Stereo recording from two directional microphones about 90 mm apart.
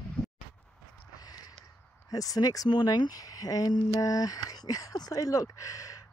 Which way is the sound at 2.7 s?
55° left (ahead or behind).